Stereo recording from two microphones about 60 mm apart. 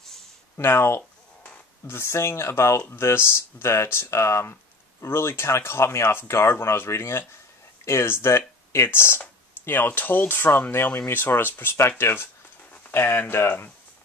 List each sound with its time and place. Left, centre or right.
0.6 s speech: left